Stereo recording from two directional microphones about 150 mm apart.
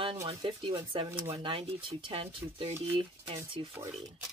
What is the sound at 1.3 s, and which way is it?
Speech, 35° right (ahead or behind).